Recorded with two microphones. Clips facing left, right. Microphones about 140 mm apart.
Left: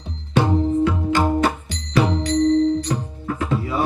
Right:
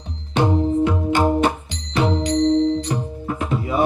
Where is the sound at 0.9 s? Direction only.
20° right (ahead or behind).